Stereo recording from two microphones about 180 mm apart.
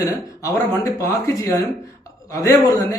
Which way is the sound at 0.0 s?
20° left (ahead or behind).